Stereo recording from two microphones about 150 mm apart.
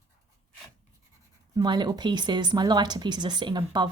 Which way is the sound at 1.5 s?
30° right (ahead or behind).